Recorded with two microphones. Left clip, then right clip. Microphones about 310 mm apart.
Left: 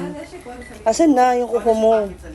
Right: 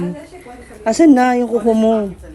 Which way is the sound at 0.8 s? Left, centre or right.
Right.